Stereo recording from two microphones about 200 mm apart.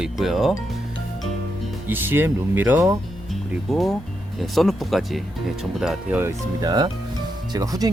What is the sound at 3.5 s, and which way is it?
Speech, centre (ahead or behind).